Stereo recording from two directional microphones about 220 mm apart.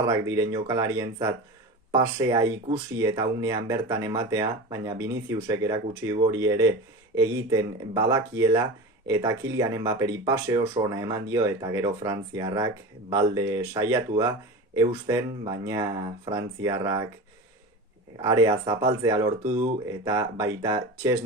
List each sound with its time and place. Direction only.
0.1 s speech: 15° right (ahead or behind)
18.2 s speech: 15° right (ahead or behind)